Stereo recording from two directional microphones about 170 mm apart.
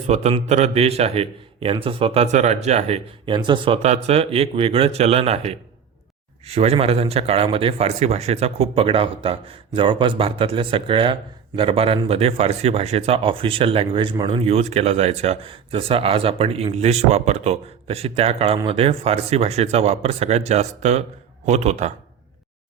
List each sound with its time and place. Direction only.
0.1 s speech: 40° right (ahead or behind)
3.8 s speech: 40° right (ahead or behind)